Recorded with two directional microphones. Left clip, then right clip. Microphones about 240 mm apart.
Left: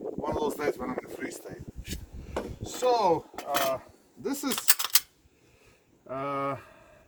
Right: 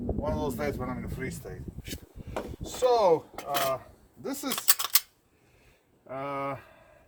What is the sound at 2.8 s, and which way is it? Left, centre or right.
Speech, right.